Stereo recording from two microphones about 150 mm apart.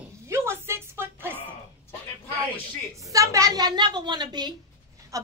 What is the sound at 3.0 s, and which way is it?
A woman's voice, 20° right (ahead or behind).